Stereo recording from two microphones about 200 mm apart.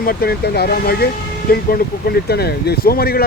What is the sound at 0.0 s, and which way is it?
Speech, 50° left (ahead or behind).